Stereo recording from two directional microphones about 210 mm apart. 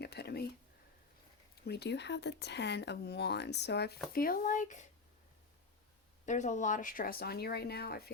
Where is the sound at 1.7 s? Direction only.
55° left (ahead or behind); by 4.8 s 35° left (ahead or behind).